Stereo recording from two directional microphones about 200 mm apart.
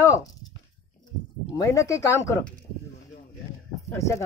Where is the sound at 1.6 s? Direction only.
15° left (ahead or behind).